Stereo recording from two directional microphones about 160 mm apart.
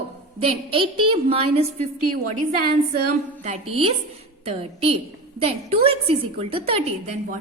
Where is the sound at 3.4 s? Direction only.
40° right (ahead or behind).